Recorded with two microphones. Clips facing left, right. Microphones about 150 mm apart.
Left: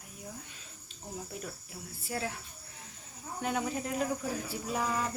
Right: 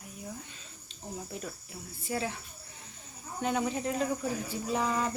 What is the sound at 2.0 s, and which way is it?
Speech, centre (ahead or behind).